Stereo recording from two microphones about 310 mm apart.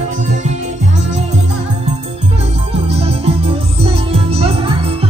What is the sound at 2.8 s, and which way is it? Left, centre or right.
Music, centre.